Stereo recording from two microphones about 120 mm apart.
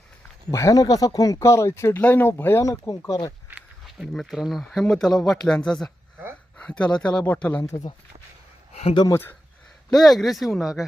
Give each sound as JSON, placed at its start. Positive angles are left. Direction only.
{"t": 0.5, "sound": "speech", "side_deg": 30}
{"t": 3.8, "sound": "speech", "side_deg": 0}
{"t": 8.7, "sound": "speech", "side_deg": 60}
{"t": 9.9, "sound": "speech", "side_deg": 0}